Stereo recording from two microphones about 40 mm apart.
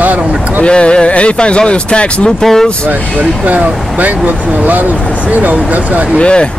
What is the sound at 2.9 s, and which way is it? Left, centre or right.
Speech, right.